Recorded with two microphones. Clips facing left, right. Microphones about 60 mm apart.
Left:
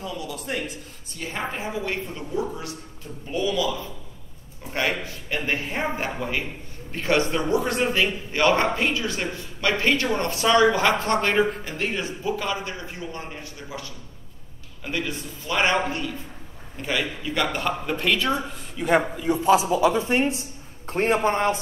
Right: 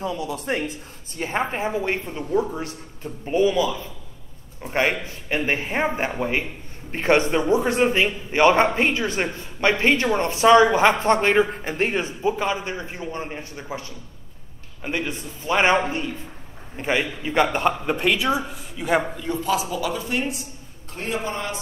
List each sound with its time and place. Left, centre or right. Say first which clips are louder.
0.0 s a man's voice: right 5 dB; right; by 19.0 s centre
19.1 s a man's voice: left 3 dB; centre
19.4 s speech: left 6 dB; left